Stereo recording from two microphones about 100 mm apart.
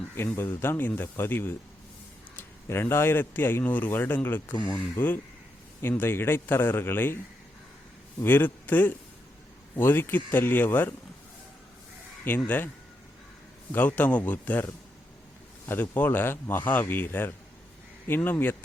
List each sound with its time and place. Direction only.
0.3 s speech: 25° left (ahead or behind)
8.2 s speech: 20° left (ahead or behind)
12.5 s speech: 20° left (ahead or behind)
13.7 s speech: 15° left (ahead or behind)
15.7 s speech: 20° left (ahead or behind)